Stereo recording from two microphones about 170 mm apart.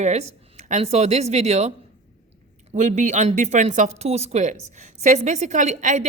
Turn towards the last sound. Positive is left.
turn(degrees=-45)  # may be behind; listen again after turning